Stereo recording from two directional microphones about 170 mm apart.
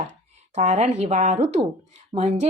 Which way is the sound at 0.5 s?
40° right (ahead or behind).